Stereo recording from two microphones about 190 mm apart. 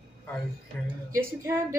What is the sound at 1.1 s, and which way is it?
Speech, 10° right (ahead or behind).